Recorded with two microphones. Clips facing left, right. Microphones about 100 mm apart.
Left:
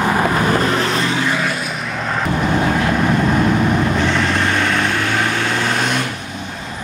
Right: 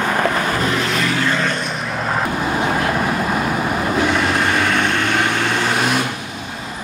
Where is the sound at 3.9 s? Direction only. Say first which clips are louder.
Even; 5° right (ahead or behind).